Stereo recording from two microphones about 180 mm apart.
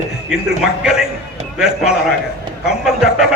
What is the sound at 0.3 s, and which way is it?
A man's voice, centre (ahead or behind).